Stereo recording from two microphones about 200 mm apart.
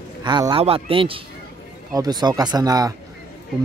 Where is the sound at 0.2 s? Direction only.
20° right (ahead or behind).